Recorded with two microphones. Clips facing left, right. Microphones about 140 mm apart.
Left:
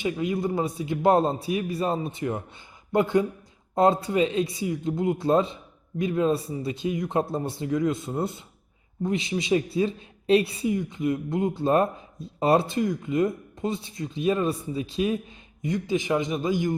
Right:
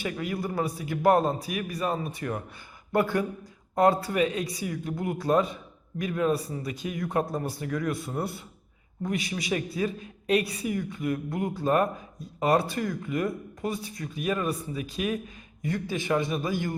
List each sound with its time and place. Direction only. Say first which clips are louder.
0.0 s speech: left 5 dB; 20° left (ahead or behind)